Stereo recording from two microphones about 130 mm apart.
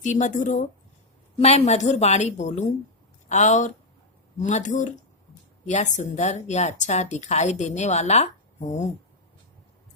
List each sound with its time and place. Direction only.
0.0 s speech: 70° left (ahead or behind)
1.4 s speech: 55° left (ahead or behind)